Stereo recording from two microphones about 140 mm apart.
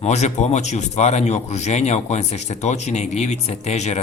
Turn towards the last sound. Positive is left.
turn(degrees=55)  # may be behind; listen again after turning